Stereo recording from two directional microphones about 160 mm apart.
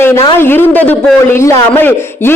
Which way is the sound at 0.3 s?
15° left (ahead or behind).